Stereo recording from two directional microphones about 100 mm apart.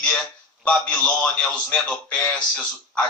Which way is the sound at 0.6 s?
10° left (ahead or behind).